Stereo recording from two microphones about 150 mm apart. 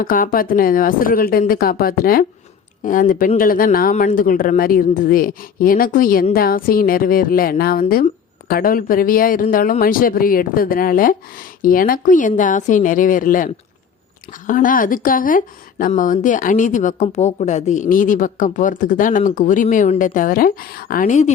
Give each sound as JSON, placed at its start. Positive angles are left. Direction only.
{"t": 0.0, "sound": "speech", "side_deg": 70}
{"t": 2.8, "sound": "speech", "side_deg": 65}
{"t": 6.3, "sound": "a woman's voice", "side_deg": 80}